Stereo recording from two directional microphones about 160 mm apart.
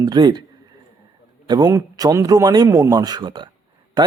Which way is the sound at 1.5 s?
20° right (ahead or behind).